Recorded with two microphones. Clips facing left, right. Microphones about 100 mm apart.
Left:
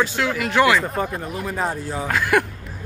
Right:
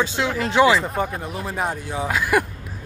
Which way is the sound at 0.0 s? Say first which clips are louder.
Left 1 dB; 25° right (ahead or behind).